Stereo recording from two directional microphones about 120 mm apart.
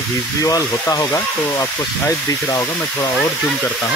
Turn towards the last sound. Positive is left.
turn(degrees=25)  # may be behind; listen again after turning